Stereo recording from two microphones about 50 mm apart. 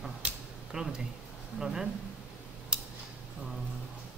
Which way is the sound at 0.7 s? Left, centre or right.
Centre.